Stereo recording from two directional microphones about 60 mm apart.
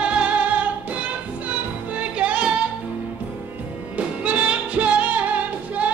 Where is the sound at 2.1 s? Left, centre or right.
Right.